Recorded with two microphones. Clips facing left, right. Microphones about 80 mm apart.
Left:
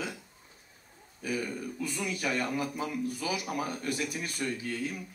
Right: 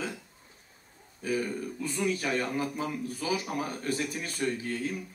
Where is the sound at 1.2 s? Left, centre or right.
Right.